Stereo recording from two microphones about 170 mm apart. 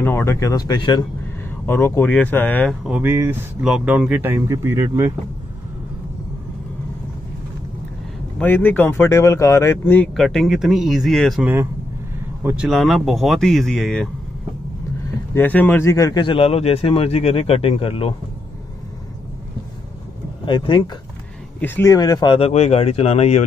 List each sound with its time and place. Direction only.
0.0 s speech: 15° left (ahead or behind)
1.7 s speech: 15° left (ahead or behind)
2.8 s speech: 10° right (ahead or behind)
8.4 s speech: 10° left (ahead or behind)
10.1 s speech: centre (ahead or behind)
12.4 s speech: 5° right (ahead or behind)
15.3 s speech: 10° left (ahead or behind); by 18.1 s 35° left (ahead or behind)
20.4 s speech: 30° left (ahead or behind)
21.5 s speech: 15° left (ahead or behind)
22.5 s speech: 40° left (ahead or behind)